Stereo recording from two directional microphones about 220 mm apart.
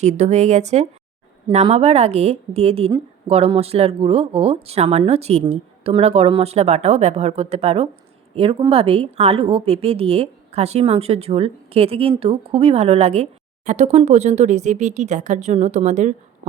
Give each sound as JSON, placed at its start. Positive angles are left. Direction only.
{"t": 0.0, "sound": "a woman's voice", "side_deg": -30}